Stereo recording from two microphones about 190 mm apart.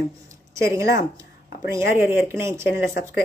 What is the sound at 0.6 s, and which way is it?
Speech, 15° right (ahead or behind).